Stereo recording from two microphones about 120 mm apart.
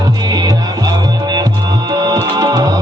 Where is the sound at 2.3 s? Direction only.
30° right (ahead or behind).